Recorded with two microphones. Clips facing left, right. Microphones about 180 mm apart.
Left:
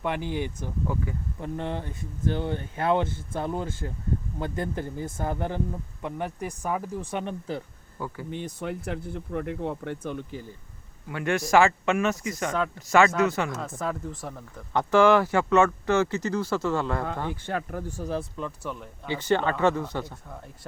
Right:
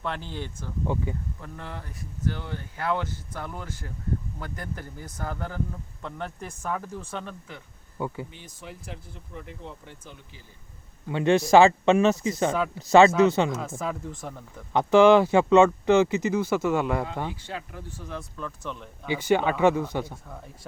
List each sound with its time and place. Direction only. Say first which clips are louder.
0.0 s speech: left 5 dB; 15° left (ahead or behind)
0.9 s speech: right 3 dB; 25° right (ahead or behind)
1.4 s speech: left 8 dB; 25° left (ahead or behind)
7.9 s speech: right 3 dB; 20° right (ahead or behind)
8.3 s speech: left 11 dB; 60° left (ahead or behind)
11.1 s speech: right 4 dB; 25° right (ahead or behind)
13.6 s speech: even; centre (ahead or behind)
14.7 s speech: right 3 dB; 15° right (ahead or behind)
17.4 s speech: left 6 dB; 50° left (ahead or behind); by 18.3 s 35° left (ahead or behind)
18.3 s speech: left 2 dB; 15° left (ahead or behind)
19.0 s speech: right 2 dB; 10° right (ahead or behind)